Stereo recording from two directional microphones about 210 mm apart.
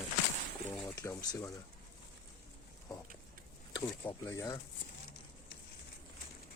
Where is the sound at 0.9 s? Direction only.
15° left (ahead or behind).